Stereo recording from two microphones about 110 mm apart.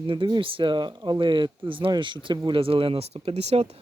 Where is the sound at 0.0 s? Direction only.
45° right (ahead or behind).